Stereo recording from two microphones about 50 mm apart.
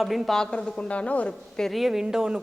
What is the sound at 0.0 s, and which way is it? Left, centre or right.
Speech, centre.